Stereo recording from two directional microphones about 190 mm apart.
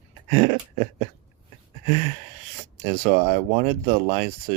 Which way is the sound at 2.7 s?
40° right (ahead or behind).